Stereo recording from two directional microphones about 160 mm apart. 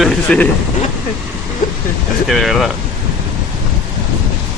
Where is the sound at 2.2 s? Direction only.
Centre (ahead or behind).